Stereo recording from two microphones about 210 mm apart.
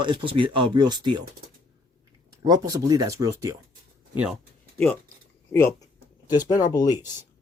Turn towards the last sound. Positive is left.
turn(degrees=20)  # may be behind; listen again after turning